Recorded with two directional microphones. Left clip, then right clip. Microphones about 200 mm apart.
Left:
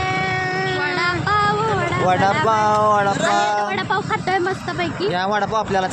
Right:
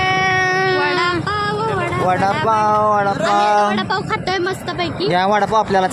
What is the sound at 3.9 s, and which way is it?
Speech, 25° right (ahead or behind).